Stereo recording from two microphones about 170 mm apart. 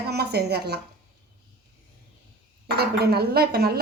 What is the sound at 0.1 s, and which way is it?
Speech, 70° right (ahead or behind).